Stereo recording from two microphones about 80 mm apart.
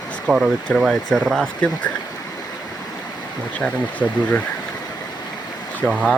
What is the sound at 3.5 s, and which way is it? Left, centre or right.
Speech, centre.